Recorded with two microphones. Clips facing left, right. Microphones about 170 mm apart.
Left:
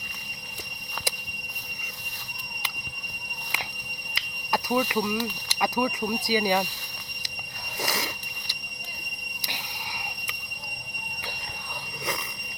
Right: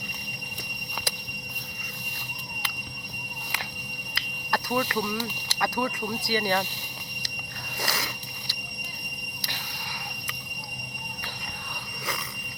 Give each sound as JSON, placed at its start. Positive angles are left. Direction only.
{"t": 4.1, "sound": "speech", "side_deg": 15}
{"t": 7.8, "sound": "squeal", "side_deg": 20}